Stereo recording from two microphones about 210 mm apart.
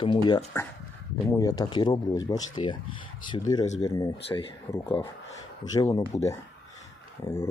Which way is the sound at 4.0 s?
20° left (ahead or behind).